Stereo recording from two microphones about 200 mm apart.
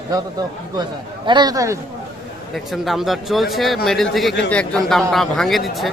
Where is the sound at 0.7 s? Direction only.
20° right (ahead or behind).